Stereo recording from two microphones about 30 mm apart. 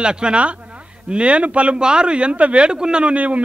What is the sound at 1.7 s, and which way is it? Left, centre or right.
Speech, right.